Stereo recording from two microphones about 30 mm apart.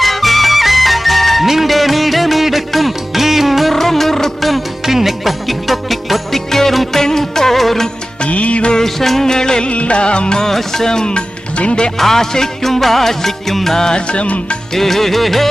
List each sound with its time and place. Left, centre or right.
0.0 s music: centre
3.7 s music: centre
6.5 s music: centre
8.3 s music: left
8.8 s music: centre
9.3 s music: left
9.6 s music: left
10.5 s music: centre
11.5 s music: left
11.9 s music: centre
13.7 s music: left
14.1 s music: left
14.8 s music: centre